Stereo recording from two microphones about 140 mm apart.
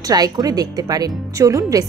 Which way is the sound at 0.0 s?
25° right (ahead or behind).